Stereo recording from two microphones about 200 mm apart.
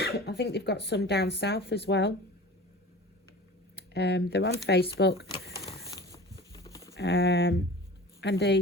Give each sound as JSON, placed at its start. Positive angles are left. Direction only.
{"t": 0.0, "sound": "speech", "side_deg": 55}
{"t": 3.8, "sound": "speech", "side_deg": 60}
{"t": 6.0, "sound": "a sound", "side_deg": 15}
{"t": 6.5, "sound": "livestock", "side_deg": 15}
{"t": 6.9, "sound": "speech", "side_deg": 60}